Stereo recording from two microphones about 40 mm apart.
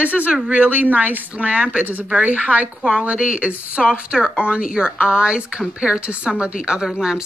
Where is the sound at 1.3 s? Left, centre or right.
Right.